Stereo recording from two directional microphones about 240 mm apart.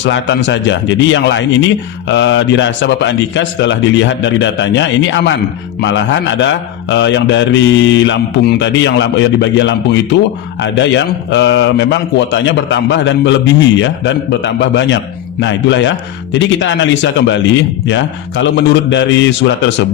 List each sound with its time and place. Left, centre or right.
0.0 s a man's voice: left